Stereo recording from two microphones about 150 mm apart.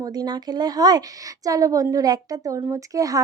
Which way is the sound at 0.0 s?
25° right (ahead or behind).